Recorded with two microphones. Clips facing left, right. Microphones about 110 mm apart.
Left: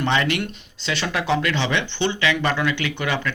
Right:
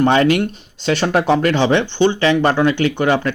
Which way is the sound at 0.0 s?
45° right (ahead or behind).